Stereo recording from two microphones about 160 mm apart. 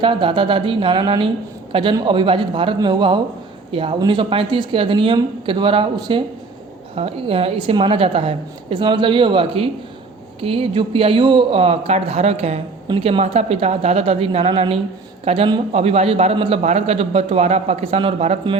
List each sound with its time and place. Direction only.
0.0 s a man's voice: 30° right (ahead or behind)